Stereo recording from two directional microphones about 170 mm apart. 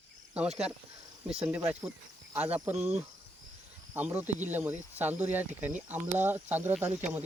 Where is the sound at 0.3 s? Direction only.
5° right (ahead or behind).